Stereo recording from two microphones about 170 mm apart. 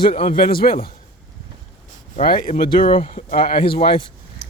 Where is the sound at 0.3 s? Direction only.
60° left (ahead or behind).